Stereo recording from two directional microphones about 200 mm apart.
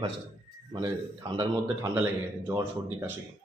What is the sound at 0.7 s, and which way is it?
A man's voice, 20° right (ahead or behind).